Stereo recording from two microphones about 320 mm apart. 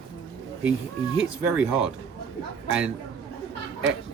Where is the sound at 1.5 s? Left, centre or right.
Centre.